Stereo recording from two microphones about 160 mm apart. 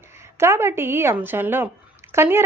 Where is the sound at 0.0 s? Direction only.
15° right (ahead or behind).